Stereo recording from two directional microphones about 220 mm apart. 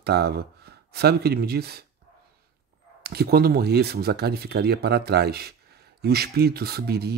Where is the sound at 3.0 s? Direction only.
45° right (ahead or behind).